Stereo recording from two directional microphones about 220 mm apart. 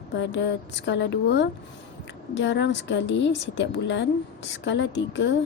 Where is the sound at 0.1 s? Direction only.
55° left (ahead or behind).